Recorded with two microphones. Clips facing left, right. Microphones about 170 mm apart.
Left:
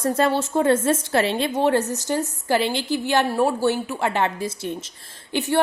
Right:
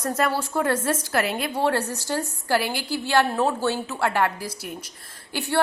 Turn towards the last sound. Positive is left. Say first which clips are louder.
# left 4 dB
turn(degrees=15)  # may be behind; listen again after turning